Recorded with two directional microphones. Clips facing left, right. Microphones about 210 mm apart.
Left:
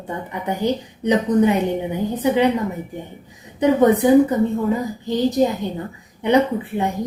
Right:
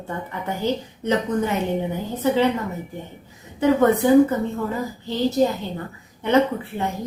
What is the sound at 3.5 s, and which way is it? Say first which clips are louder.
A woman's voice: left 2 dB; 15° left (ahead or behind).